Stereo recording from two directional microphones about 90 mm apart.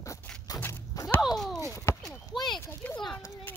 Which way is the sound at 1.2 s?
5° right (ahead or behind).